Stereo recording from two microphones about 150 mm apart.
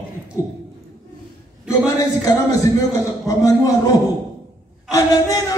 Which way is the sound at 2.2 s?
20° left (ahead or behind).